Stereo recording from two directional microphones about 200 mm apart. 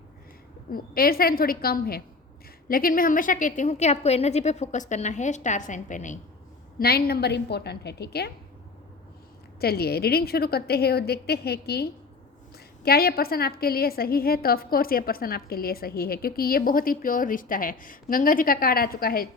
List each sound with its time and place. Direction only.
0.7 s a woman's voice: 45° left (ahead or behind)
6.7 s a woman's voice: 50° left (ahead or behind)
9.6 s a woman's voice: 50° left (ahead or behind)